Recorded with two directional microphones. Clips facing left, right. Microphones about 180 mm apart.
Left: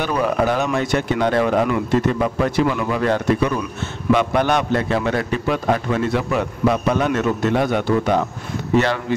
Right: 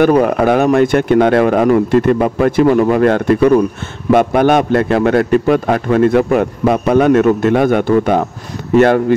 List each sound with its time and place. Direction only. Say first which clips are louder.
0.0 s a man's voice: right 9 dB; 55° right (ahead or behind)